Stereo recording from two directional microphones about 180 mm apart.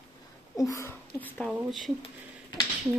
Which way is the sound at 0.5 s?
20° left (ahead or behind).